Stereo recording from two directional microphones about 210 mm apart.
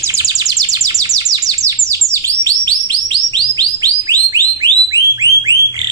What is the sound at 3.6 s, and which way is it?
Alarm, 20° right (ahead or behind).